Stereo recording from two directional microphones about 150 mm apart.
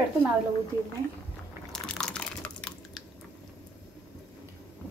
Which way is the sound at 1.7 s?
5° left (ahead or behind).